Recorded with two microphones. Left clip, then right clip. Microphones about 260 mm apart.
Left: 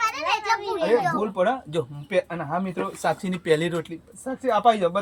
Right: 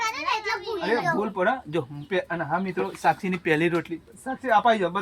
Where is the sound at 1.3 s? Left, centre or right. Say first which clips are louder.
Left 1 dB; centre.